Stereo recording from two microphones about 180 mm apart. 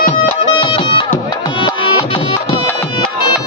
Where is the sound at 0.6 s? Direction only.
25° left (ahead or behind).